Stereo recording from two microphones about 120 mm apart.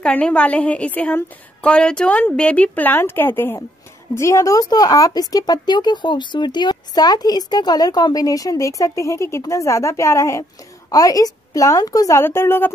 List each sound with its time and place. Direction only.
0.0 s a woman's voice: 10° left (ahead or behind); by 12.2 s 30° left (ahead or behind)
12.2 s a woman's voice: 20° left (ahead or behind)